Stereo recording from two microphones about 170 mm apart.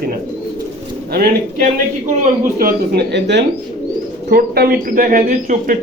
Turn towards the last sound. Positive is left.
turn(degrees=-50)  # may be behind; listen again after turning